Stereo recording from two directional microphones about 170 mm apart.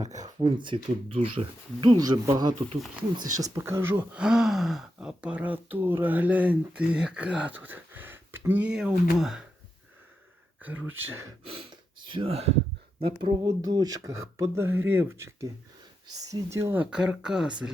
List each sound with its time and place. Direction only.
0.1 s speech: 25° right (ahead or behind)
3.6 s speech: 15° right (ahead or behind)
10.6 s speech: 10° right (ahead or behind)
11.4 s a sound: 35° right (ahead or behind)
13.2 s speech: 20° right (ahead or behind); by 17.7 s 5° right (ahead or behind)